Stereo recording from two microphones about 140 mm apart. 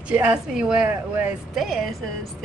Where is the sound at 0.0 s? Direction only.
10° right (ahead or behind).